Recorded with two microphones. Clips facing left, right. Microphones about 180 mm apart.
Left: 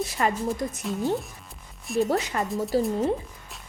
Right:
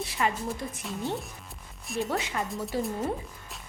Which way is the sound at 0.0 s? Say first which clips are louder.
Left 3 dB; 45° left (ahead or behind).